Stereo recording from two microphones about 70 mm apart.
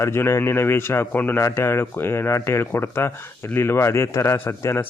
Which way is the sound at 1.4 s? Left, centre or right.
Left.